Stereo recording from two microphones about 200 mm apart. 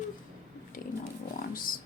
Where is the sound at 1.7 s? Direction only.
45° left (ahead or behind).